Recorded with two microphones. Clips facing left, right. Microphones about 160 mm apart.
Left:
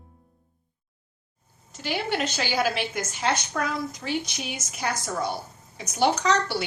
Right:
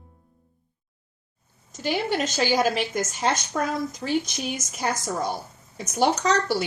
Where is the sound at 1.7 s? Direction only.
45° right (ahead or behind).